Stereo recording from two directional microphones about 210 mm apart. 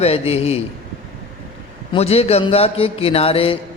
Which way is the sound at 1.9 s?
30° left (ahead or behind).